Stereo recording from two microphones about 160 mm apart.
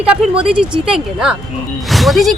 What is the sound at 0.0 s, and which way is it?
A woman's voice, 5° right (ahead or behind).